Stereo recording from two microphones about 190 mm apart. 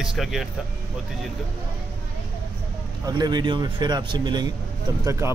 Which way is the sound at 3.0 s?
20° right (ahead or behind).